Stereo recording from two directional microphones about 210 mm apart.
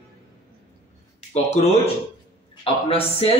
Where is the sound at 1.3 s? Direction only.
30° left (ahead or behind).